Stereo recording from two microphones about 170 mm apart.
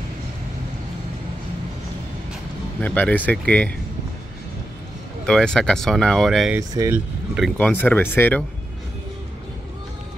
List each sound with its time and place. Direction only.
2.8 s speech: 10° left (ahead or behind)
5.2 s speech: 5° left (ahead or behind)
6.7 s speech: 20° right (ahead or behind)
7.5 s speech: 10° left (ahead or behind)